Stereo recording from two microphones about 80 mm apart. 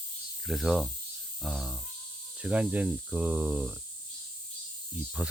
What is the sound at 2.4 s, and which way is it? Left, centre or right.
Speech, centre.